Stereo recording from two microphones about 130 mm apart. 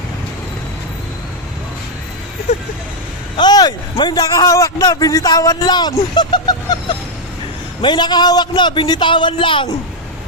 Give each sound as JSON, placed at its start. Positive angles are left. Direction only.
{"t": 3.3, "sound": "a man's voice", "side_deg": 35}